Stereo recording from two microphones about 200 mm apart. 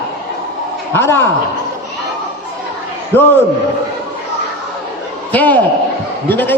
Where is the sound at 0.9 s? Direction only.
10° left (ahead or behind).